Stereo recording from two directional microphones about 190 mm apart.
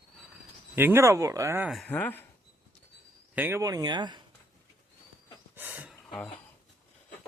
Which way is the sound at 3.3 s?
10° right (ahead or behind).